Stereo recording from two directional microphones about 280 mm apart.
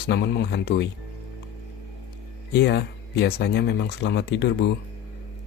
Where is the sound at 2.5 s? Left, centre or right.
Left.